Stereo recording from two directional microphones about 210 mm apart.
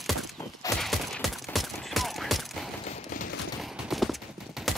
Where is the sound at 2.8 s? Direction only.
35° left (ahead or behind).